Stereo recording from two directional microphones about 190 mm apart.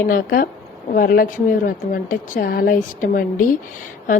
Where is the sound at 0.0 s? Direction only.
45° left (ahead or behind).